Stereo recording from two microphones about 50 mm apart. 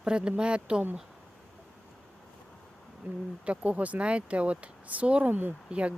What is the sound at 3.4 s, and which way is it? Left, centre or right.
Speech, right.